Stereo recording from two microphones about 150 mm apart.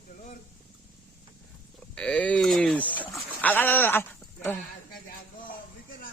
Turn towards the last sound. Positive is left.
turn(degrees=15)  # may be behind; listen again after turning